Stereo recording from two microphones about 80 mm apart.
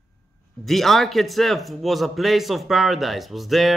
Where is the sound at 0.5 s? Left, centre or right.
Centre.